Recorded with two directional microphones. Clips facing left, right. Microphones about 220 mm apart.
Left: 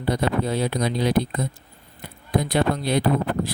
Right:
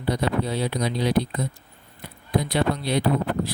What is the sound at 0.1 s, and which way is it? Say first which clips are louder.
Speech: left 1 dB; 50° left (ahead or behind).